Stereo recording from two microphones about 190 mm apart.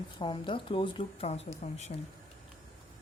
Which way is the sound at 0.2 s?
25° left (ahead or behind).